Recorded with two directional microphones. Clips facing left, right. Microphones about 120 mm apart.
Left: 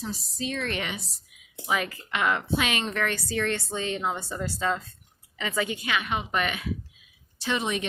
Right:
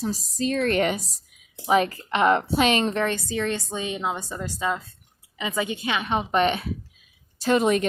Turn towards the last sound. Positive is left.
turn(degrees=-45)  # may be behind; listen again after turning